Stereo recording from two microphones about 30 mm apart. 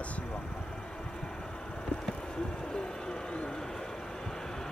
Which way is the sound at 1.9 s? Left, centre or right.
Left.